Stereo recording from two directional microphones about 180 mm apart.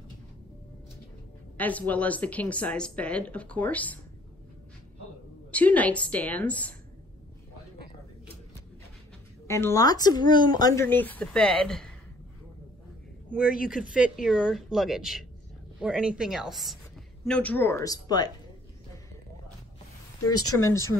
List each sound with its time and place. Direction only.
1.6 s a woman's voice: 10° left (ahead or behind)
5.5 s a woman's voice: 10° left (ahead or behind)
9.5 s a woman's voice: 15° left (ahead or behind)
13.3 s a woman's voice: 5° right (ahead or behind); by 18.3 s 20° left (ahead or behind)
20.2 s a woman's voice: 15° left (ahead or behind)